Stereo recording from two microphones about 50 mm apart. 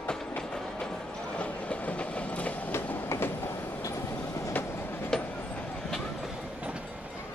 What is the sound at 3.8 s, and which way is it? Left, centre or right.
Train, left.